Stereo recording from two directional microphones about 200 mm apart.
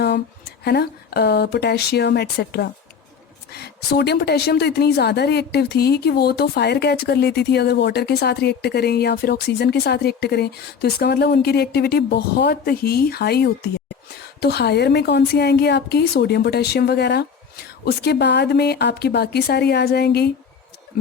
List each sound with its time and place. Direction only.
0.6 s a woman's voice: 55° left (ahead or behind)